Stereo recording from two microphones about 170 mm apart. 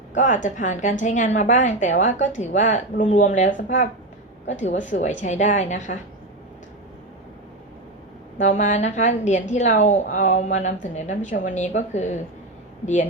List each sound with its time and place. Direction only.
0.1 s a woman's voice: 45° left (ahead or behind)
8.4 s a woman's voice: 45° left (ahead or behind)